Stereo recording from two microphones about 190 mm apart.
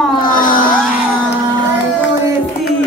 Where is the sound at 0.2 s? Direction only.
45° left (ahead or behind).